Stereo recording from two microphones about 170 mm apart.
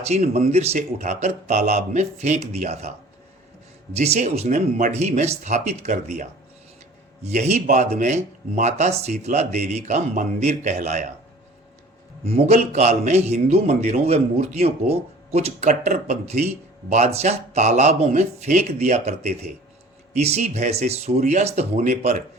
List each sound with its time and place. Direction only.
0.3 s a man's voice: 40° right (ahead or behind)
3.9 s a man's voice: 40° right (ahead or behind)
12.2 s a man's voice: 40° right (ahead or behind)